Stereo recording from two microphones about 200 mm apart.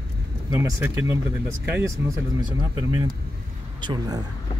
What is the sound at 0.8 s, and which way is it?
Speech, 10° right (ahead or behind).